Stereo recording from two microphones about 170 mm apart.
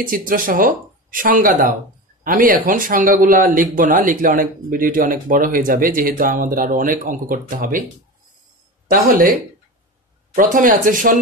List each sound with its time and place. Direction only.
0.0 s speech: 55° right (ahead or behind)
10.3 s speech: 55° right (ahead or behind)